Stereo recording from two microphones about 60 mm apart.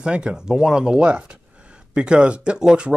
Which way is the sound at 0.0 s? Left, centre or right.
Centre.